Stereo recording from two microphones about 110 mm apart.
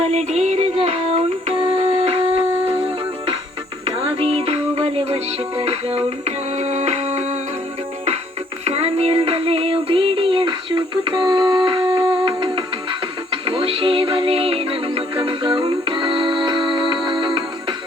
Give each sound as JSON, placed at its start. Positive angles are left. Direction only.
{"t": 0.0, "sound": "music", "side_deg": -75}
{"t": 4.4, "sound": "music", "side_deg": -65}
{"t": 8.6, "sound": "music", "side_deg": -65}